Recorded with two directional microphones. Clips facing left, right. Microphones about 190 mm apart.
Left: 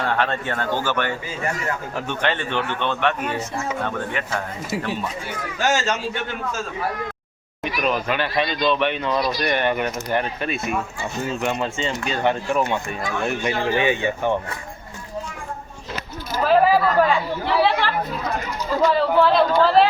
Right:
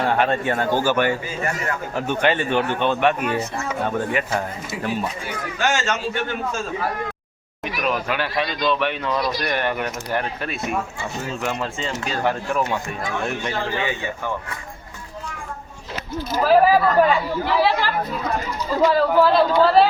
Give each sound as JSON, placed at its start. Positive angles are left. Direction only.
{"t": 0.0, "sound": "a man's voice", "side_deg": -15}
{"t": 5.5, "sound": "a man's voice", "side_deg": 40}
{"t": 7.6, "sound": "speech", "side_deg": 0}
{"t": 13.4, "sound": "speech", "side_deg": 15}
{"t": 16.4, "sound": "speech", "side_deg": -5}